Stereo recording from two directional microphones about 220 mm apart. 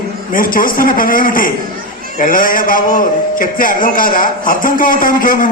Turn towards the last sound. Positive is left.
turn(degrees=40)  # may be behind; listen again after turning